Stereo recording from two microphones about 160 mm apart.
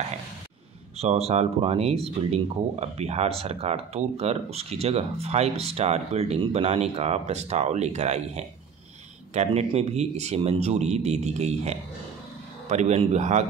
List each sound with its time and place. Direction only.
0.9 s speech: 40° right (ahead or behind)